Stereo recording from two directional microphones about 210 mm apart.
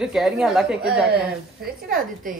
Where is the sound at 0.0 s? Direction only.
Centre (ahead or behind).